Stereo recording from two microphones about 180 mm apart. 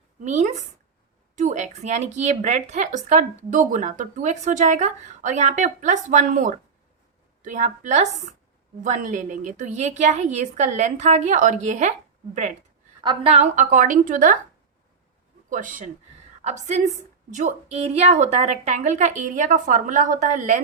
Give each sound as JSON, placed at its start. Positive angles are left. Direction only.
{"t": 0.2, "sound": "a woman's voice", "side_deg": -40}
{"t": 13.0, "sound": "a woman's voice", "side_deg": -30}
{"t": 15.4, "sound": "a woman's voice", "side_deg": -45}